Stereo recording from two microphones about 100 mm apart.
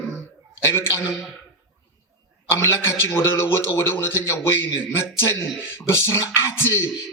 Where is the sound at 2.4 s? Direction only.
25° left (ahead or behind).